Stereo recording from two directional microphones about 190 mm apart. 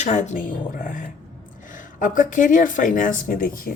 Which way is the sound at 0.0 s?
40° left (ahead or behind).